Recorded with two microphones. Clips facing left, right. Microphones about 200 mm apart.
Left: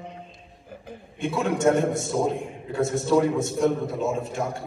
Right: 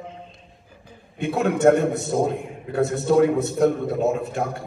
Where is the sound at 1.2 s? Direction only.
60° right (ahead or behind).